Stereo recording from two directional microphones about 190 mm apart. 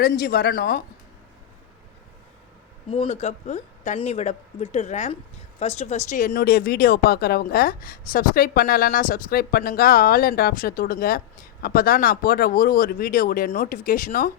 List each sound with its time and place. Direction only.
0.0 s speech: 50° left (ahead or behind)
2.9 s speech: 30° left (ahead or behind); by 14.3 s 45° left (ahead or behind)